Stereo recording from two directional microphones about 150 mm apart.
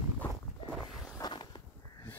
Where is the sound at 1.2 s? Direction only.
25° left (ahead or behind).